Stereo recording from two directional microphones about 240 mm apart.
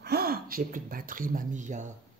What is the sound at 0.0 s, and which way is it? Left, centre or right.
Speech, right.